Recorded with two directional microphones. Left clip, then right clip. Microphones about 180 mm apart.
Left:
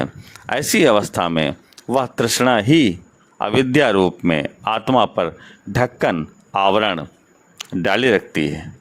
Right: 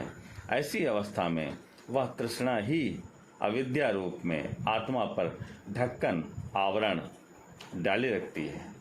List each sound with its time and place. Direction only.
0.4 s speech: 60° left (ahead or behind)